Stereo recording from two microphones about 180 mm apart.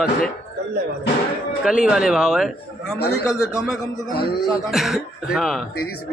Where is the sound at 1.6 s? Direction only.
5° right (ahead or behind).